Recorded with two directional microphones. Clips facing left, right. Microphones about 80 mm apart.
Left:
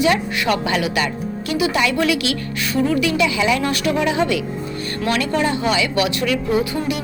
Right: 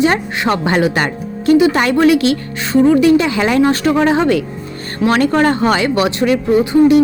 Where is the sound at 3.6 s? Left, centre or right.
Right.